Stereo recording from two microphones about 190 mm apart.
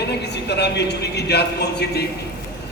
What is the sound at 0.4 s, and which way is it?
A man's voice, 60° left (ahead or behind).